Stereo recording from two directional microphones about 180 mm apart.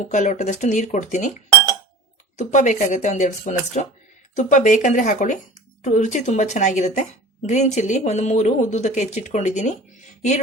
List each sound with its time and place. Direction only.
0.1 s speech: 40° left (ahead or behind)
2.4 s speech: 40° left (ahead or behind)